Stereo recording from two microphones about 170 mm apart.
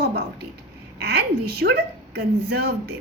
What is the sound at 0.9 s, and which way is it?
A woman's voice, 75° right (ahead or behind).